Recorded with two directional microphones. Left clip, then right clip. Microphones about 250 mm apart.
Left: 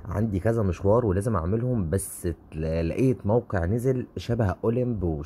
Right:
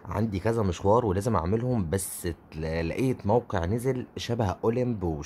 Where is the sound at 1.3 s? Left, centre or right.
Centre.